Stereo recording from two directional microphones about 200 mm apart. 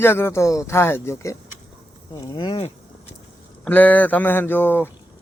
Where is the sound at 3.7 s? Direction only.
10° left (ahead or behind).